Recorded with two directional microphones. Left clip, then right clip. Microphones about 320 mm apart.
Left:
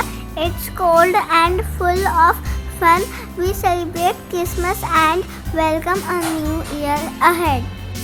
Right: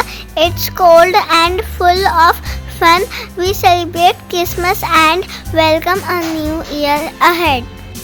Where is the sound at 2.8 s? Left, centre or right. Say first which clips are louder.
Right 4 dB; right.